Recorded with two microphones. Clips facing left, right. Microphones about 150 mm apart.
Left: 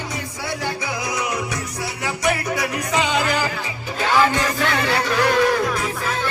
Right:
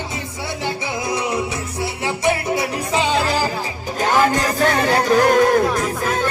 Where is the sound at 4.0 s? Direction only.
45° right (ahead or behind).